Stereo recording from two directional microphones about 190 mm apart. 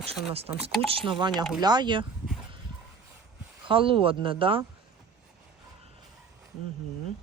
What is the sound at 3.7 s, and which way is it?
Speech, 25° right (ahead or behind).